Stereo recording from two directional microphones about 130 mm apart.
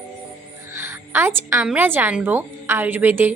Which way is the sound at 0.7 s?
20° right (ahead or behind).